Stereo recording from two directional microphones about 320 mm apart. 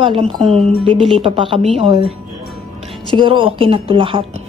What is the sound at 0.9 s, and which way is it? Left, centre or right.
Speech, centre.